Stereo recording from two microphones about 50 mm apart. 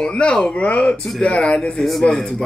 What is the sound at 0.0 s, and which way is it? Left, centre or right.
Speech, left.